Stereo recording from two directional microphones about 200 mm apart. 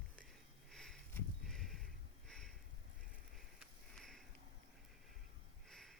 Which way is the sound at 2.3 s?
5° left (ahead or behind).